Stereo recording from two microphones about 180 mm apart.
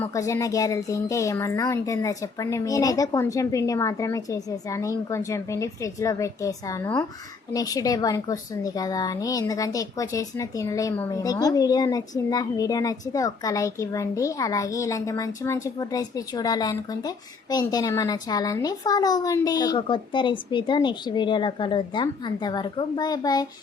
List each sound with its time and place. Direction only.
0.0 s a woman's voice: 15° left (ahead or behind)